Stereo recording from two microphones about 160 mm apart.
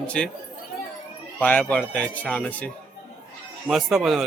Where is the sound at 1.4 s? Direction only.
10° left (ahead or behind).